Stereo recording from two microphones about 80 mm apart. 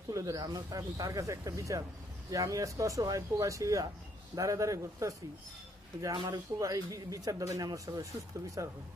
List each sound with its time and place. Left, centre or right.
0.1 s speech: right
6.3 s speech: right